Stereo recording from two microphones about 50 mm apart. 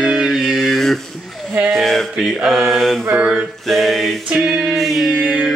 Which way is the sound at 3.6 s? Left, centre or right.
Centre.